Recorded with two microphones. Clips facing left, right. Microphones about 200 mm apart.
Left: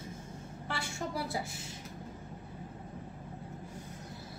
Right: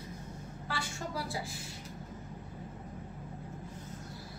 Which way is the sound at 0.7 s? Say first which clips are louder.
Left 1 dB; 25° left (ahead or behind).